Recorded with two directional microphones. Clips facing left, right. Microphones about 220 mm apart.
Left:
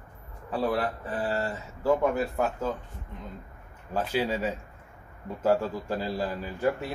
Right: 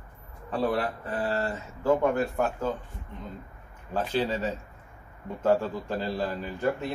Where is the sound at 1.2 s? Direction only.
10° left (ahead or behind).